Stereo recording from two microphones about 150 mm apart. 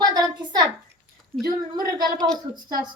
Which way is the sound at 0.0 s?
25° right (ahead or behind).